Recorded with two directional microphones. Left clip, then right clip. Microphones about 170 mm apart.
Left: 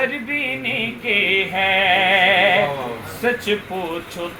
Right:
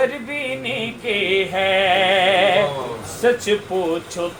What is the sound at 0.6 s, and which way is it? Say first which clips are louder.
Music: left 2 dB; 25° right (ahead or behind).